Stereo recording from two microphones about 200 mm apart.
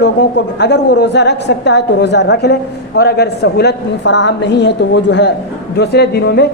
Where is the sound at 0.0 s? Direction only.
60° left (ahead or behind).